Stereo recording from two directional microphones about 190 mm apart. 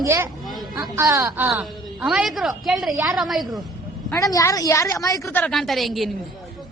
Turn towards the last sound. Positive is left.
turn(degrees=0)  # may be behind; listen again after turning